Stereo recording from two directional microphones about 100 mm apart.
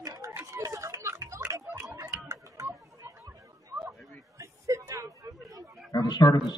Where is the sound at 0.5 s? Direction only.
35° right (ahead or behind).